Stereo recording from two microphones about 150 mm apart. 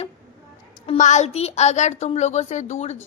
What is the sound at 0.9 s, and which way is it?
A woman's voice, 50° left (ahead or behind).